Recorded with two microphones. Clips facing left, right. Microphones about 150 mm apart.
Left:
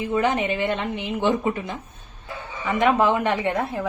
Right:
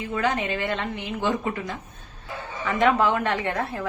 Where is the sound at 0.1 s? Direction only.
20° left (ahead or behind).